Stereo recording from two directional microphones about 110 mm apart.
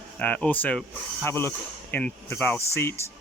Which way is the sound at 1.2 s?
20° left (ahead or behind).